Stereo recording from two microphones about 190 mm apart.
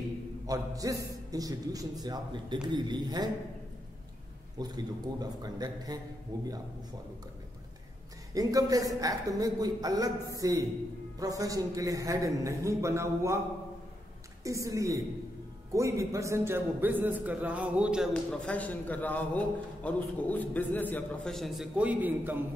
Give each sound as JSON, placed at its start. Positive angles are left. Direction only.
{"t": 0.5, "sound": "a man's voice", "side_deg": -20}
{"t": 4.6, "sound": "a man's voice", "side_deg": -20}
{"t": 8.4, "sound": "a man's voice", "side_deg": -20}
{"t": 14.4, "sound": "a man's voice", "side_deg": -15}